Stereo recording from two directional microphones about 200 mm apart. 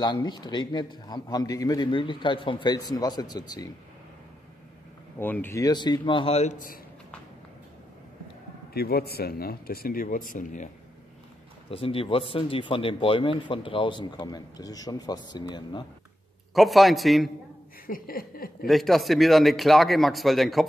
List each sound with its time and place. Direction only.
0.0 s speech: 20° left (ahead or behind)
5.2 s speech: 10° left (ahead or behind); by 6.8 s 40° left (ahead or behind)
8.7 s speech: 50° left (ahead or behind)
11.7 s speech: 25° left (ahead or behind)
16.5 s a man's voice: centre (ahead or behind)
17.8 s speech: 45° left (ahead or behind)
18.7 s a man's voice: centre (ahead or behind)